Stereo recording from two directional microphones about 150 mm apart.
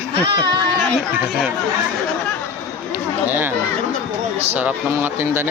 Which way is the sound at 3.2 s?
15° right (ahead or behind).